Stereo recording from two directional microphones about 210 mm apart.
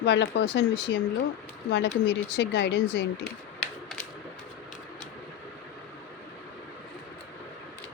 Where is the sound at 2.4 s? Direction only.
55° left (ahead or behind).